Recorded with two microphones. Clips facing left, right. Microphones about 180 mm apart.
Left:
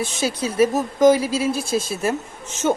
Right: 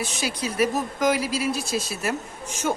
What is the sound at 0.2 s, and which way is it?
Speech, 25° left (ahead or behind).